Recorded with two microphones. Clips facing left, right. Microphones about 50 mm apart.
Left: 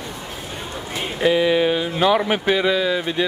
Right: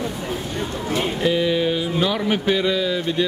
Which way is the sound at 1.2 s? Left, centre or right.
Centre.